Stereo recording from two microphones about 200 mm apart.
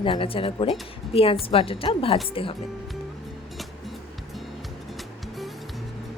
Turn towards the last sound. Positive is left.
turn(degrees=0)  # may be behind; listen again after turning